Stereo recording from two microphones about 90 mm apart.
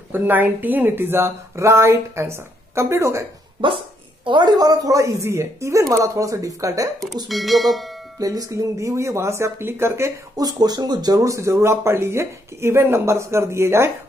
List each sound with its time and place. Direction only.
0.1 s a woman's voice: 20° right (ahead or behind)
4.2 s speech: 60° right (ahead or behind); by 6.9 s 40° right (ahead or behind)
7.2 s speech: centre (ahead or behind)
8.2 s speech: 40° right (ahead or behind)
10.3 s speech: 45° right (ahead or behind); by 13.9 s 30° right (ahead or behind)